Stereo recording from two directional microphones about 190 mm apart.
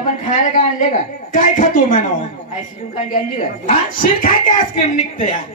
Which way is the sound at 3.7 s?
45° left (ahead or behind).